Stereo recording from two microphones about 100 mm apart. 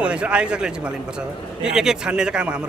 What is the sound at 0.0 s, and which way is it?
A man's voice, 10° right (ahead or behind).